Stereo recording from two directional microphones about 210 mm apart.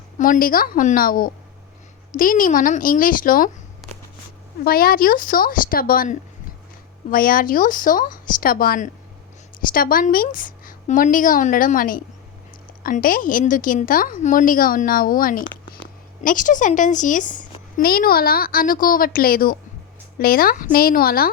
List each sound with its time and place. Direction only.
0.2 s a woman's voice: 40° left (ahead or behind)
4.6 s a woman's voice: 45° left (ahead or behind)